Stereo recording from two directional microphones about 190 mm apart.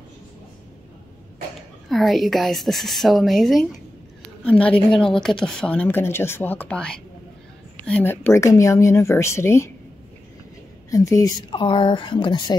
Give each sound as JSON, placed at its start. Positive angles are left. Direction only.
{"t": 1.9, "sound": "speech", "side_deg": 0}
{"t": 10.9, "sound": "speech", "side_deg": 15}